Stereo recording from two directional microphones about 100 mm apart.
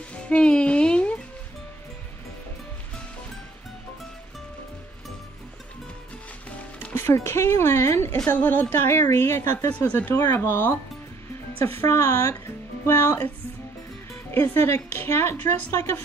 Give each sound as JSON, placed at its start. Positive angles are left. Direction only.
{"t": 0.1, "sound": "music", "side_deg": 10}
{"t": 6.9, "sound": "a woman's voice", "side_deg": 25}
{"t": 11.8, "sound": "a woman's voice", "side_deg": 30}
{"t": 14.3, "sound": "a woman's voice", "side_deg": 20}